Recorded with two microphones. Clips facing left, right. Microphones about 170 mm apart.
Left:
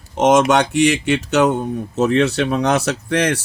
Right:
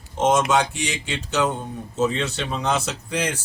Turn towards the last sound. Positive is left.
turn(degrees=75)  # may be behind; listen again after turning